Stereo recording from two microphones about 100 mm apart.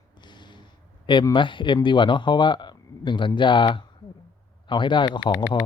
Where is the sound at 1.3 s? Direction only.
55° left (ahead or behind).